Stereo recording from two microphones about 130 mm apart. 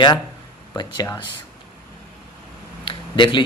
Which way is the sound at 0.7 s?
30° left (ahead or behind).